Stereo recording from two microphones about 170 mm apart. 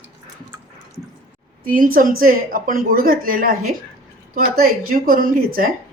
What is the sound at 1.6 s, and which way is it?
Speech, 55° right (ahead or behind).